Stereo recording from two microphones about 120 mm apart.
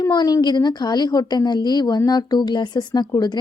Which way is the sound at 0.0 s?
35° left (ahead or behind).